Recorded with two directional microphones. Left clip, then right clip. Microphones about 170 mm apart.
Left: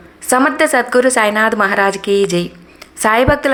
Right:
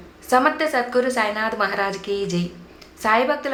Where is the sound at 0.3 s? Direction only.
40° left (ahead or behind).